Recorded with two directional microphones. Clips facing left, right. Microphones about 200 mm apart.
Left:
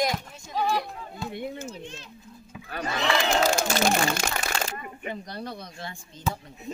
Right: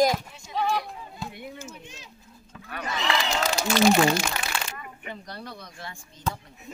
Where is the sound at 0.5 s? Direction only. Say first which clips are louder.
Even; centre (ahead or behind).